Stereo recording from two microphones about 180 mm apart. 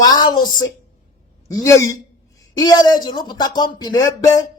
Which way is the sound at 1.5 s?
15° left (ahead or behind).